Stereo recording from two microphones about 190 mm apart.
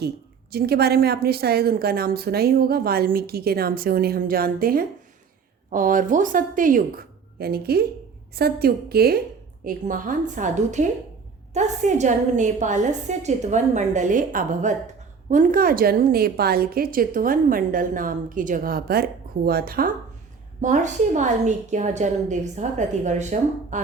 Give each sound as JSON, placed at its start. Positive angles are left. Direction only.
{"t": 0.5, "sound": "a woman's voice", "side_deg": -55}
{"t": 20.6, "sound": "a woman's voice", "side_deg": -40}